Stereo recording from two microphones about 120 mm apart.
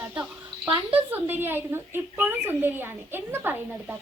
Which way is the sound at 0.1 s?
15° right (ahead or behind).